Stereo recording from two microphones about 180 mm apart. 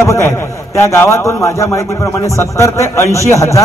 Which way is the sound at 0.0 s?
15° left (ahead or behind).